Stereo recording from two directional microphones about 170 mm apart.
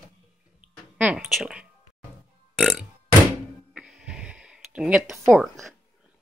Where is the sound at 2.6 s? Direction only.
5° left (ahead or behind).